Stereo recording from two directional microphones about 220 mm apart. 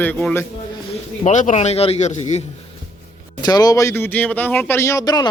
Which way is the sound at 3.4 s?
15° left (ahead or behind).